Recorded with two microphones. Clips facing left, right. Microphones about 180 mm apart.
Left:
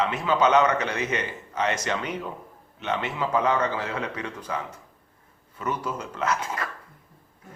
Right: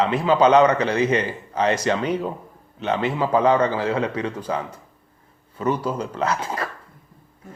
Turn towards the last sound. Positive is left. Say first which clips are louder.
# right 3 dB
turn(degrees=-30)  # may be behind; listen again after turning